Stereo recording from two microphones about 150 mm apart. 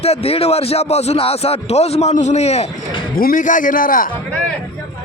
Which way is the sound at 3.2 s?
70° left (ahead or behind).